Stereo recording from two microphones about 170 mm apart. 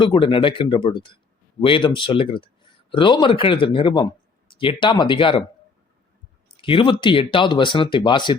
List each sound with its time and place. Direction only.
0.0 s speech: 30° left (ahead or behind)
6.6 s speech: 30° left (ahead or behind)